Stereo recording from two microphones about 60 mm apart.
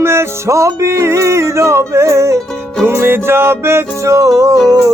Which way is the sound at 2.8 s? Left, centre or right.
Right.